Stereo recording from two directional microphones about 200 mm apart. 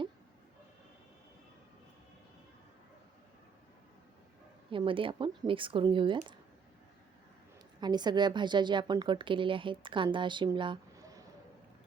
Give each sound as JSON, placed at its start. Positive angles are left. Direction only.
{"t": 4.7, "sound": "a woman's voice", "side_deg": -25}
{"t": 7.8, "sound": "a woman's voice", "side_deg": -20}